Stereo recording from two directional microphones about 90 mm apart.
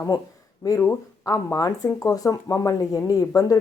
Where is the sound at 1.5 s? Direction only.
40° left (ahead or behind).